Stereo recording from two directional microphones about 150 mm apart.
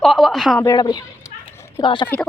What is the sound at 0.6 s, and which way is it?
Speech, 25° left (ahead or behind).